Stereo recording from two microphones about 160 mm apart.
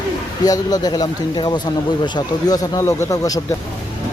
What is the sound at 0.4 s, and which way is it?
Speech, 25° left (ahead or behind).